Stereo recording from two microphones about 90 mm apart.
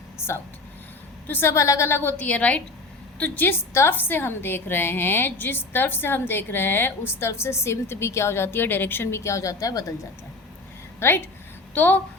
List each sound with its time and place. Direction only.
1.3 s a woman's voice: 25° left (ahead or behind)
2.1 s a woman's voice: 15° left (ahead or behind); by 10.1 s 40° left (ahead or behind)
11.0 s a woman's voice: 25° left (ahead or behind)